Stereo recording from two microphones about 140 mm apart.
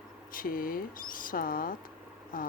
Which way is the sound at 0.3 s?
85° left.